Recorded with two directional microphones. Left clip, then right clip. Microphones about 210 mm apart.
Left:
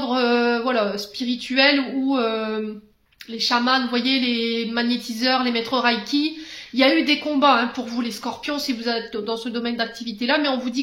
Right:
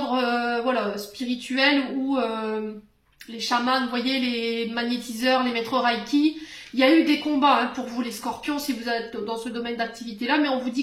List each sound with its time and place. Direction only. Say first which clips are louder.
0.1 s speech: left 6 dB; 50° left (ahead or behind)